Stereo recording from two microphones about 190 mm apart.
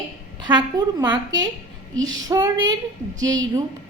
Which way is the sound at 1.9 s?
90° right.